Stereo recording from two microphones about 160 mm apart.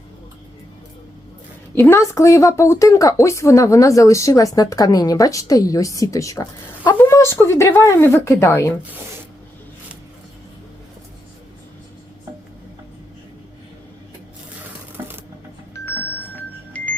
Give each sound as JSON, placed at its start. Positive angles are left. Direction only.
{"t": 1.7, "sound": "speech", "side_deg": 15}
{"t": 14.9, "sound": "a sound", "side_deg": -15}
{"t": 16.7, "sound": "music", "side_deg": 10}